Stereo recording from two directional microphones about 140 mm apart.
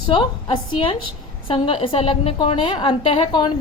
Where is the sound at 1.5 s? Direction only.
40° left (ahead or behind).